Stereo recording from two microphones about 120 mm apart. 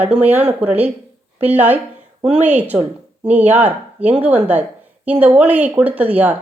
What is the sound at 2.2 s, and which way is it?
A woman's voice, 10° right (ahead or behind).